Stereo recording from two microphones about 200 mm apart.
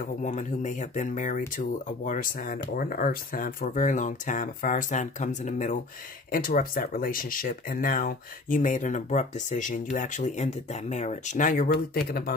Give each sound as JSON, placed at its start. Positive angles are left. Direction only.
{"t": 0.2, "sound": "speech", "side_deg": 40}